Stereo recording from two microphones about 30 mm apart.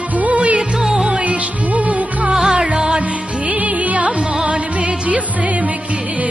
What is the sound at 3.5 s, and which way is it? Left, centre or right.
Music, right.